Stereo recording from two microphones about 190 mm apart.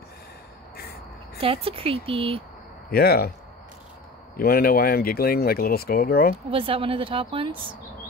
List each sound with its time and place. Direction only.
0.7 s a sound: 55° left (ahead or behind)
1.4 s speech: 30° right (ahead or behind)
2.9 s speech: 55° left (ahead or behind)
4.4 s speech: 55° left (ahead or behind)
6.5 s speech: 30° right (ahead or behind)